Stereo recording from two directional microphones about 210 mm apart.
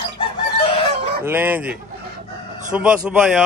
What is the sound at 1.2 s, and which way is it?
Speech, 10° right (ahead or behind).